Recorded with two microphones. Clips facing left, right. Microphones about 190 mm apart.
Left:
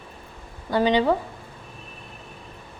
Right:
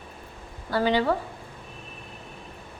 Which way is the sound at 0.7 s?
20° left (ahead or behind).